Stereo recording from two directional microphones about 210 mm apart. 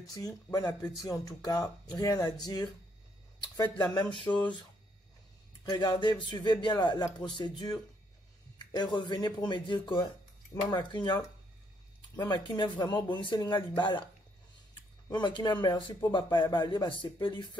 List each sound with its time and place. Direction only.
0.0 s speech: 15° left (ahead or behind)
5.7 s speech: 20° left (ahead or behind)
12.2 s speech: 20° left (ahead or behind)